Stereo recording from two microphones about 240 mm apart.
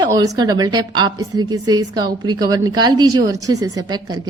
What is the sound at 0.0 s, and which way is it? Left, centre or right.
A woman's voice, centre.